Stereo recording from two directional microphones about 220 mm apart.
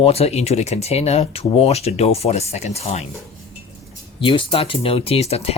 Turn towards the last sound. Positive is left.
turn(degrees=30)  # may be behind; listen again after turning